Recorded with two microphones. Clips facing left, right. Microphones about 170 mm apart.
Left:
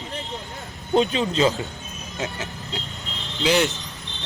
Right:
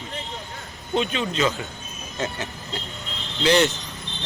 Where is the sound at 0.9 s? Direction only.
35° left (ahead or behind).